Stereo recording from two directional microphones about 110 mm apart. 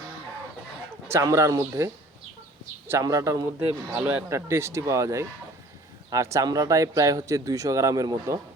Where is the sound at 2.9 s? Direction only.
30° right (ahead or behind).